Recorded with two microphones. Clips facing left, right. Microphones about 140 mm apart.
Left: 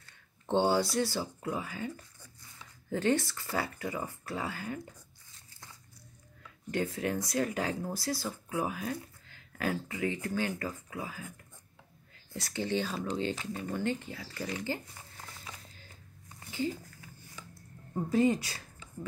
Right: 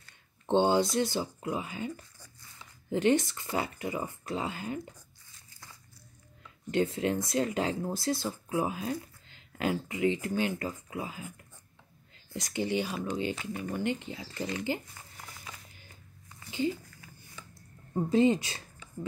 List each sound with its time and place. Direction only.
0.5 s speech: 20° right (ahead or behind)
2.9 s speech: 20° right (ahead or behind)
6.7 s speech: 25° right (ahead or behind)
12.4 s speech: 15° right (ahead or behind)
16.4 s a sound: 20° right (ahead or behind)
17.9 s speech: 20° right (ahead or behind)